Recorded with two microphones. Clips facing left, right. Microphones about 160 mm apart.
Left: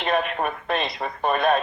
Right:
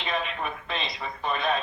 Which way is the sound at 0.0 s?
55° left (ahead or behind).